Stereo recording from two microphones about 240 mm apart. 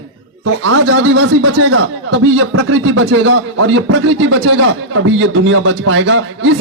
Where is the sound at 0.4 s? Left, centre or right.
Right.